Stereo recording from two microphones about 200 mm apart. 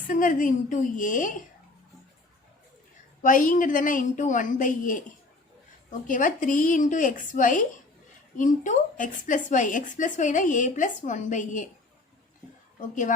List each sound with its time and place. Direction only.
0.1 s a woman's voice: 40° left (ahead or behind)
3.2 s a woman's voice: 40° left (ahead or behind)